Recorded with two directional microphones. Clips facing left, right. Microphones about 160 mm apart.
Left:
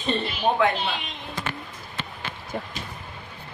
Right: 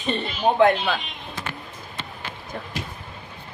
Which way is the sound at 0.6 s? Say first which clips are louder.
Right 7 dB; 30° right (ahead or behind).